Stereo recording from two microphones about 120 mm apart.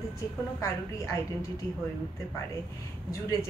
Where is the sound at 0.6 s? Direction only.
25° left (ahead or behind).